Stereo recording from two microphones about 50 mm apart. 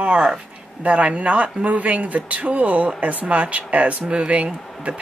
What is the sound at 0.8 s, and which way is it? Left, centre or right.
Speech, right.